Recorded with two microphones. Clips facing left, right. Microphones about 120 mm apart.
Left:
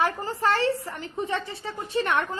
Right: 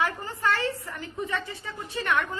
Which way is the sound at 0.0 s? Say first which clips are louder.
Left 3 dB; 30° left (ahead or behind).